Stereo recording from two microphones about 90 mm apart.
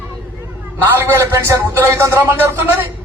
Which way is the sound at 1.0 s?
30° right (ahead or behind).